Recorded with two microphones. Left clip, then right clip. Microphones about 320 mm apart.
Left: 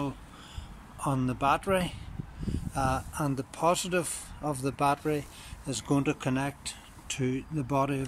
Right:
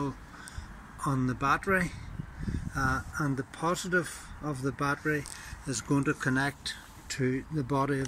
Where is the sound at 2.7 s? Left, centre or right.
Centre.